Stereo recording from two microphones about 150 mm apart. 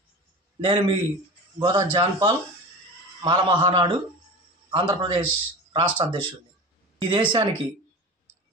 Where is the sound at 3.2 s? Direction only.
30° right (ahead or behind).